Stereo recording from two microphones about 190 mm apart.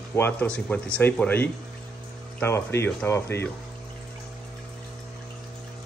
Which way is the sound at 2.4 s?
10° left (ahead or behind).